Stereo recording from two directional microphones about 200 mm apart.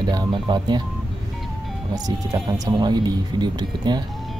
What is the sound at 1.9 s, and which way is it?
Speech, 20° right (ahead or behind).